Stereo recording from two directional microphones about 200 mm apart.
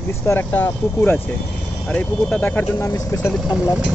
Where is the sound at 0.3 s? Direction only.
10° left (ahead or behind).